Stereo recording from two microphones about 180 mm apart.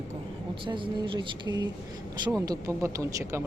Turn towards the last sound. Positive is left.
turn(degrees=-15)  # may be behind; listen again after turning